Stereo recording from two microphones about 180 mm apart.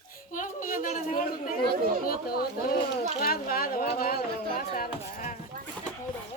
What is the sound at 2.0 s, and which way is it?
Speech, 55° left (ahead or behind).